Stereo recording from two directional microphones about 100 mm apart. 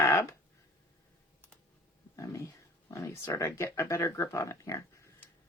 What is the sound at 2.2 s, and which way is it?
Speech, 30° left (ahead or behind).